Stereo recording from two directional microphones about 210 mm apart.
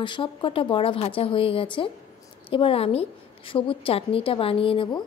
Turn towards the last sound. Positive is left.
turn(degrees=25)  # may be behind; listen again after turning